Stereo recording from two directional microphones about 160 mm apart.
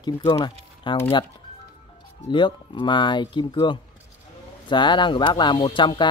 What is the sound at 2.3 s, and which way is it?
Speech, 30° left (ahead or behind).